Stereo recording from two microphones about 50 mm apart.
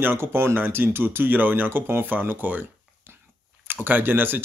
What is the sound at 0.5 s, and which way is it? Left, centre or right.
Speech, right.